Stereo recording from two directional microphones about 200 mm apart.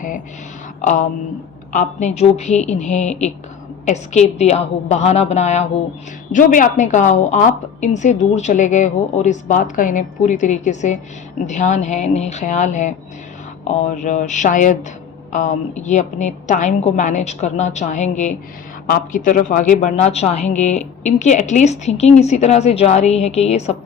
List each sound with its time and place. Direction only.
0.8 s speech: 40° left (ahead or behind)